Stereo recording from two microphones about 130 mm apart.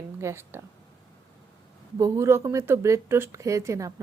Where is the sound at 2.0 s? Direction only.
20° right (ahead or behind).